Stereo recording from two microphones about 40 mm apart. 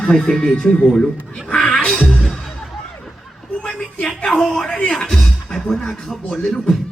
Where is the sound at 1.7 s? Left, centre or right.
Centre.